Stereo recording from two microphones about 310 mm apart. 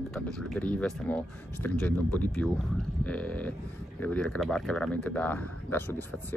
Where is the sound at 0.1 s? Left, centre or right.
Centre.